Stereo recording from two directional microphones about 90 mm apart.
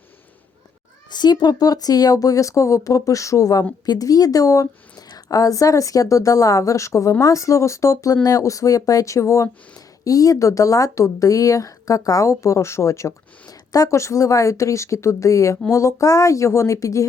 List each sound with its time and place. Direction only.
1.1 s a woman's voice: 50° left (ahead or behind); by 17.1 s 35° left (ahead or behind)